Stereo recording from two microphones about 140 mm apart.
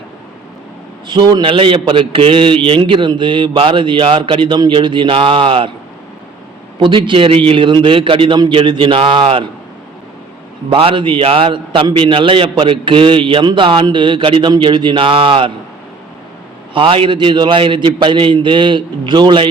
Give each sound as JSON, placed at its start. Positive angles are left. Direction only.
{"t": 1.0, "sound": "a man's voice", "side_deg": -35}
{"t": 6.7, "sound": "a man's voice", "side_deg": -35}
{"t": 10.7, "sound": "a man's voice", "side_deg": -40}
{"t": 16.7, "sound": "a man's voice", "side_deg": -40}